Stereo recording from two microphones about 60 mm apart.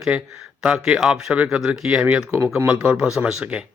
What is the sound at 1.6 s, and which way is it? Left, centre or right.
Speech, centre.